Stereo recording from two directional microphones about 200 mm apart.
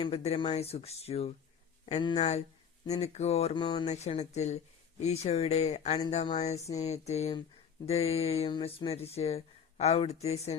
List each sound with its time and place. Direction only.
0.0 s speech: 30° left (ahead or behind)